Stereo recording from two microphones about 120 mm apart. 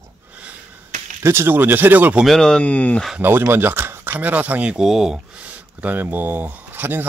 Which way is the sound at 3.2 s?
20° right (ahead or behind).